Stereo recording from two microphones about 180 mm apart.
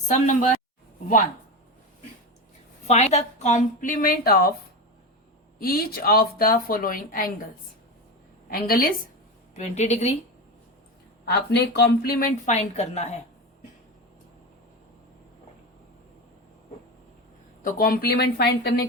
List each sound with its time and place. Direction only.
0.1 s speech: 40° left (ahead or behind)
2.8 s speech: 35° left (ahead or behind); by 4.5 s 55° left (ahead or behind)
5.5 s speech: 55° left (ahead or behind)
8.4 s a woman's voice: 55° left (ahead or behind)
9.6 s a woman's voice: 40° left (ahead or behind)
11.3 s a woman's voice: 65° left (ahead or behind)
12.5 s a woman's voice: 40° left (ahead or behind)
17.6 s a woman's voice: 55° left (ahead or behind)